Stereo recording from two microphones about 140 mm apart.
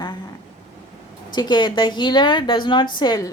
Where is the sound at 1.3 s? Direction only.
30° left (ahead or behind).